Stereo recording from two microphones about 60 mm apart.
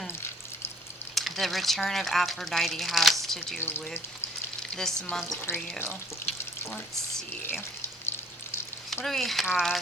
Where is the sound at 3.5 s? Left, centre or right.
Left.